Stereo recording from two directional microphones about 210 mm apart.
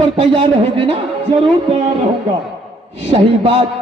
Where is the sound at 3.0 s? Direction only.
25° right (ahead or behind).